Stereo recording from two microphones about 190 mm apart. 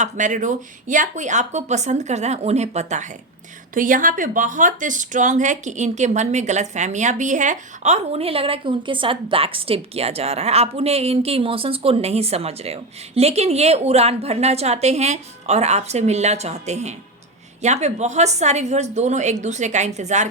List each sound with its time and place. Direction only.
0.0 s speech: 40° right (ahead or behind)